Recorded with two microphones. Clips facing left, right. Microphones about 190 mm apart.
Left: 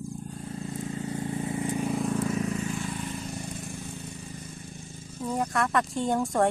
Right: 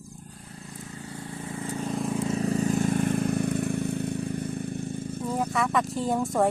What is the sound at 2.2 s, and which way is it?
Vehicle, 30° right (ahead or behind).